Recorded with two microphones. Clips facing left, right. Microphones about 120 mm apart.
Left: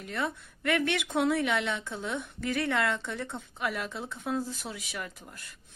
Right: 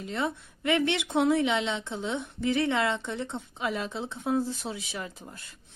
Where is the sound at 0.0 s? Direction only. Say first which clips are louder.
Right 2 dB; 20° right (ahead or behind).